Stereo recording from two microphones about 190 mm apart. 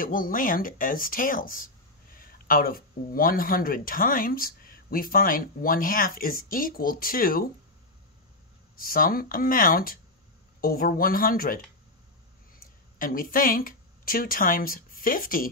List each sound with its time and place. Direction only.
0.0 s speech: 45° left (ahead or behind)
8.7 s speech: 50° left (ahead or behind)
13.0 s a woman's voice: 50° left (ahead or behind)